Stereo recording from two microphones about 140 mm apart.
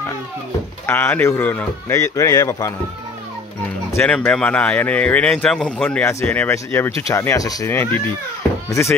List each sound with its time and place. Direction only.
0.8 s speech: 15° left (ahead or behind)
3.9 s speech: 10° left (ahead or behind)